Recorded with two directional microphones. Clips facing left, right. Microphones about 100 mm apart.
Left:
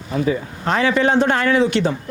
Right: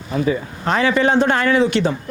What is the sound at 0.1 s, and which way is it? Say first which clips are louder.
A man's voice: even; 35° right (ahead or behind).